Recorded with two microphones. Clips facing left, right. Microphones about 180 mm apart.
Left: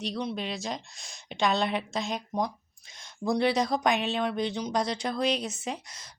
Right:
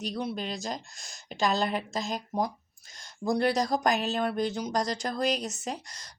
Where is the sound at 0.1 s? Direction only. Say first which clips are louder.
Even; 5° right (ahead or behind).